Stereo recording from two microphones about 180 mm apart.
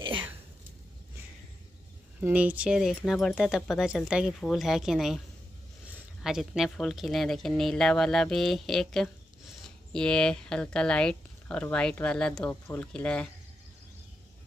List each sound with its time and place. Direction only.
0.0 s a sound: 30° right (ahead or behind)
2.1 s speech: 10° right (ahead or behind)
6.2 s speech: 5° right (ahead or behind)